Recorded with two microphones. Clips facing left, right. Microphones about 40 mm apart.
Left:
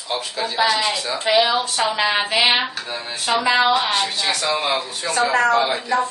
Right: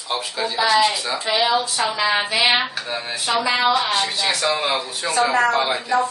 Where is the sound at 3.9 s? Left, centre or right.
Centre.